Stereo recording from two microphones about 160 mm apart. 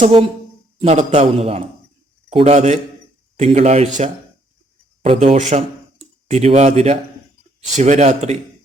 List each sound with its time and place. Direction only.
0.8 s a man's voice: 45° right (ahead or behind)